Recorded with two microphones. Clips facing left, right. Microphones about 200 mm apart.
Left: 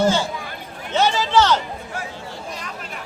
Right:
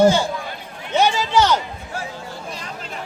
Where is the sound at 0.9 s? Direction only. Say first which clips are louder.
Even; 15° right (ahead or behind).